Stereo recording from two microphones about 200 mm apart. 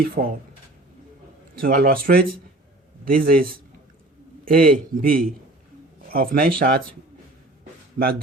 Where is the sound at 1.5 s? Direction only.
50° right (ahead or behind).